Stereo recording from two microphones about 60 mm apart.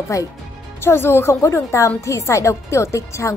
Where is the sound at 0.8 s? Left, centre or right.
Left.